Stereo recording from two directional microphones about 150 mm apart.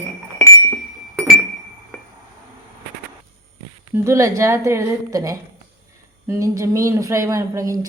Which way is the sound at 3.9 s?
20° right (ahead or behind).